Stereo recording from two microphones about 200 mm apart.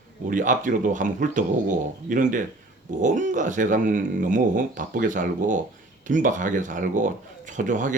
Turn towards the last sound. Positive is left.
turn(degrees=-40)  # may be behind; listen again after turning